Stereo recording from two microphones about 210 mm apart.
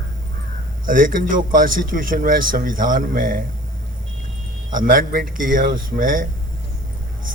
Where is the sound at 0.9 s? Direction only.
40° right (ahead or behind).